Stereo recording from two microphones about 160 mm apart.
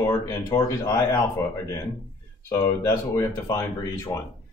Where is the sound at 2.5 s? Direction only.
20° left (ahead or behind).